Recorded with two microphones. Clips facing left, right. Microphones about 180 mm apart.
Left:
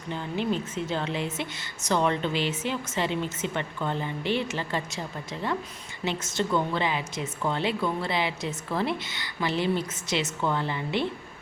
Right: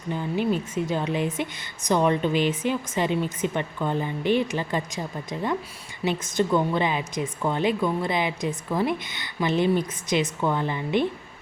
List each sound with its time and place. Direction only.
0.1 s a woman's voice: 10° right (ahead or behind)